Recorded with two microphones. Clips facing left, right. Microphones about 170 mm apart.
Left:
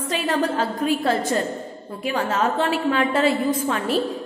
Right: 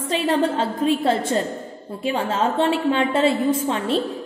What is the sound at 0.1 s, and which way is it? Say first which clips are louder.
A woman's voice: right 3 dB; 25° right (ahead or behind).